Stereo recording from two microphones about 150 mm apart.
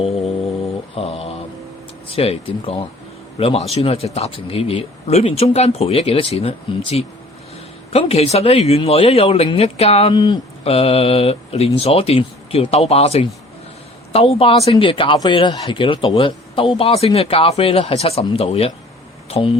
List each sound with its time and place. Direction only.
0.9 s mantra: 40° left (ahead or behind)
2.0 s speech: 40° left (ahead or behind)